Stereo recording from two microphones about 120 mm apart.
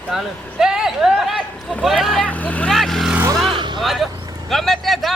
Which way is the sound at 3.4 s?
40° right (ahead or behind).